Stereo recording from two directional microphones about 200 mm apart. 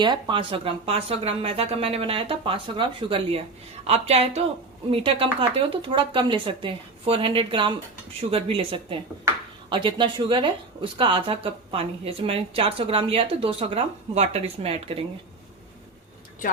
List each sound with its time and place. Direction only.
0.0 s a woman's voice: 25° right (ahead or behind)
9.3 s speech: 15° right (ahead or behind)
9.6 s a woman's voice: 25° right (ahead or behind)